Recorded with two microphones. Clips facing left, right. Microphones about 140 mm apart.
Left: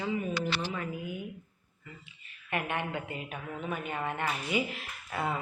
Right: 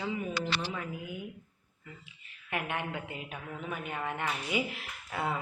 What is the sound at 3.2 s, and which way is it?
Speech, 15° left (ahead or behind).